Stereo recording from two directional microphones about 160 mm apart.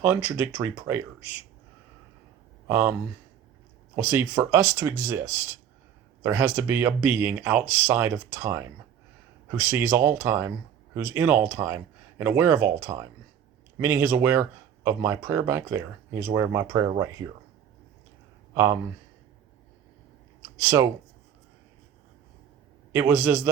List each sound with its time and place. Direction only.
0.0 s speech: 10° right (ahead or behind)
2.6 s speech: 10° right (ahead or behind)
3.9 s speech: 15° right (ahead or behind)
18.5 s speech: 20° right (ahead or behind)
20.6 s speech: 15° right (ahead or behind)
22.9 s speech: 10° right (ahead or behind)